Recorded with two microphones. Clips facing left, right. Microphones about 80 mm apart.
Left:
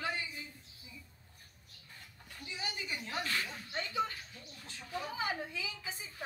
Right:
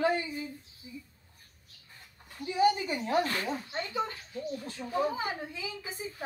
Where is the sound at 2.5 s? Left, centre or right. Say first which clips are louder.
Right 16 dB; right.